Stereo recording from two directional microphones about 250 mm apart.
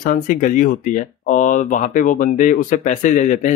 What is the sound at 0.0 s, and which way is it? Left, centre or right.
Speech, left.